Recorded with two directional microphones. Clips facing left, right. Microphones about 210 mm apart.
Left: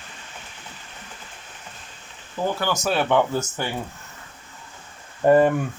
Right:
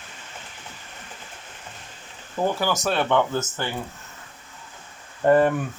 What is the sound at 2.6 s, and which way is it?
Speech, centre (ahead or behind).